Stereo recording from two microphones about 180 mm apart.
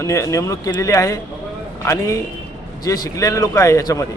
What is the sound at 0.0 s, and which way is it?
A man's voice, 15° left (ahead or behind).